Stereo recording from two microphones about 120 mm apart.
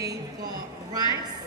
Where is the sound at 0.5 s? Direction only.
30° right (ahead or behind).